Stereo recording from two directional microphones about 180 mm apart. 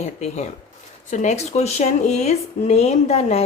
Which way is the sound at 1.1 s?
40° left (ahead or behind).